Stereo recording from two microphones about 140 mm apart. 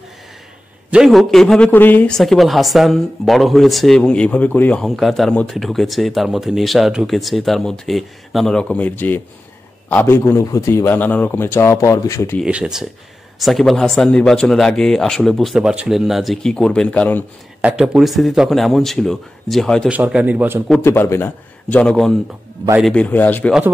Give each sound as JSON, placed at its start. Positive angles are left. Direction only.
{"t": 0.8, "sound": "speech", "side_deg": -5}
{"t": 1.7, "sound": "a man's voice", "side_deg": 15}
{"t": 12.4, "sound": "a man's voice", "side_deg": -5}
{"t": 17.6, "sound": "speech", "side_deg": -5}
{"t": 19.9, "sound": "a man's voice", "side_deg": -10}
{"t": 20.8, "sound": "a man's voice", "side_deg": 20}